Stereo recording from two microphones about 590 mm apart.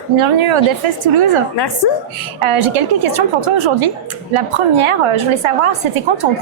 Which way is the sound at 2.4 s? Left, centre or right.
Right.